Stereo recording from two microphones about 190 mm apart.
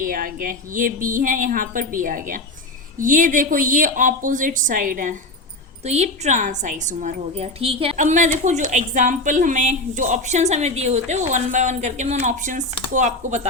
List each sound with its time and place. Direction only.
0.0 s a woman's voice: 45° right (ahead or behind)